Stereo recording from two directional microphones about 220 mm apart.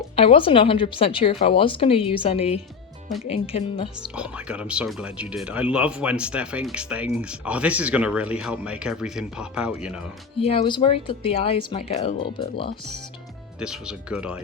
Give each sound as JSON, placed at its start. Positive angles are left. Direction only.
{"t": 0.2, "sound": "a woman's voice", "side_deg": 25}
{"t": 4.1, "sound": "speech", "side_deg": -5}
{"t": 10.4, "sound": "a woman's voice", "side_deg": 25}
{"t": 13.6, "sound": "speech", "side_deg": -5}